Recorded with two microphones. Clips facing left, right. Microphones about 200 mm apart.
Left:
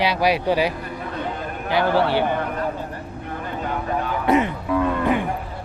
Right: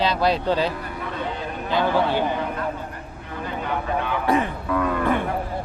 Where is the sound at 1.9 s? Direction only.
15° right (ahead or behind).